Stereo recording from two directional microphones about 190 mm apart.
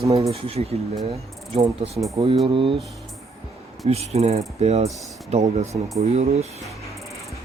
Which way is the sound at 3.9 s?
35° right (ahead or behind).